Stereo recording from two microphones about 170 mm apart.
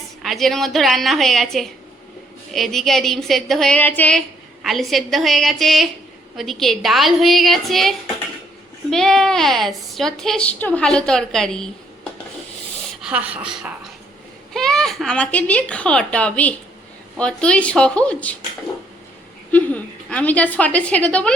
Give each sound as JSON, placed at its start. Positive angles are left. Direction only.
{"t": 0.2, "sound": "a woman's voice", "side_deg": 0}
{"t": 13.0, "sound": "a woman's voice", "side_deg": -5}
{"t": 19.5, "sound": "speech", "side_deg": 10}